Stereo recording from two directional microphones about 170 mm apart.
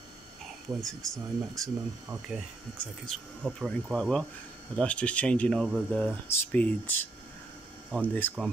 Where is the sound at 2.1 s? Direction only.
20° right (ahead or behind).